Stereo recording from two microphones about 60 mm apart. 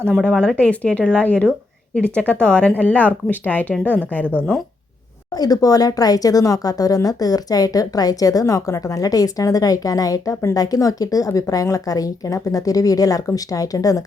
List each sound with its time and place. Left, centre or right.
0.2 s speech: centre
0.5 s speech: left
5.4 s speech: left